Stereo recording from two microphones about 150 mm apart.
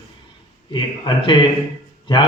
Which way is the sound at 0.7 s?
30° left (ahead or behind).